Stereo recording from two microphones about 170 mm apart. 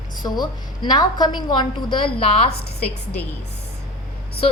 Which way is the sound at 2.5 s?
70° left (ahead or behind).